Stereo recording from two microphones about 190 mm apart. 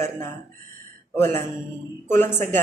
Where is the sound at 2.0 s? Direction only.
10° left (ahead or behind).